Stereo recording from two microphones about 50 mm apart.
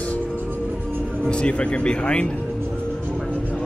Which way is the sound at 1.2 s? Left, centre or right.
Centre.